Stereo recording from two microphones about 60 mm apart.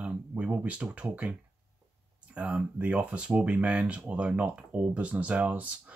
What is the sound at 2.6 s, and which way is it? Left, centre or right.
Speech, right.